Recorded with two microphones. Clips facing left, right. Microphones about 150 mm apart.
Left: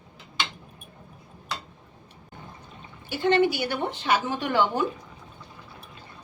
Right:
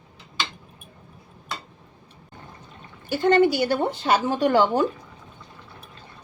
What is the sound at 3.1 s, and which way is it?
A woman's voice, 45° right (ahead or behind).